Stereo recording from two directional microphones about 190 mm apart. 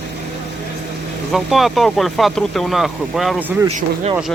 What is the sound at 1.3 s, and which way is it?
Speech, centre (ahead or behind).